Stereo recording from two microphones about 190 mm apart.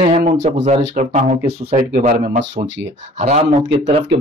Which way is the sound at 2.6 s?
75° right (ahead or behind).